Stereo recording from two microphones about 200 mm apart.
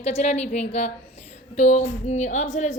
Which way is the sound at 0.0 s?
35° left (ahead or behind).